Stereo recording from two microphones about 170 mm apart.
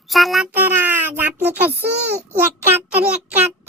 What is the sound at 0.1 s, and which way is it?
Child singing, centre (ahead or behind).